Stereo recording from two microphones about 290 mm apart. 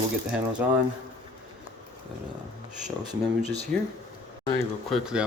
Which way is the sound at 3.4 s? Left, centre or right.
Left.